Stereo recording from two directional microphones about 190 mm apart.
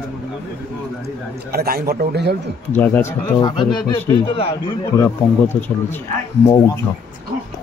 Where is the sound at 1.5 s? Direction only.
55° right (ahead or behind).